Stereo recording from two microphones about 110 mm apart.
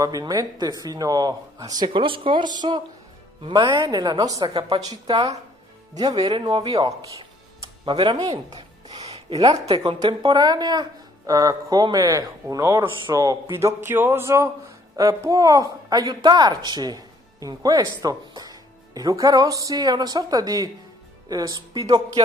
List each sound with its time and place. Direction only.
0.0 s speech: 35° right (ahead or behind)
1.9 s speech: 50° right (ahead or behind); by 6.3 s 35° right (ahead or behind)
6.3 s speech: 45° right (ahead or behind)
7.8 s speech: 45° right (ahead or behind)
8.8 s a sound: 70° right (ahead or behind)
9.7 s speech: 60° right (ahead or behind)
9.9 s speech: 40° right (ahead or behind)